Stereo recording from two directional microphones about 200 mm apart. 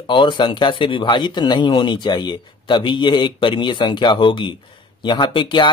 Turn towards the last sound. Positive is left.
turn(degrees=25)  # may be behind; listen again after turning